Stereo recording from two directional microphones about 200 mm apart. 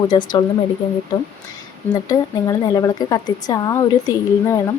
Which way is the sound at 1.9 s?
15° left (ahead or behind).